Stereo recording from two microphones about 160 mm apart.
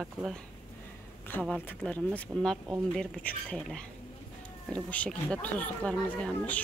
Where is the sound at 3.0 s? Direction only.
10° left (ahead or behind).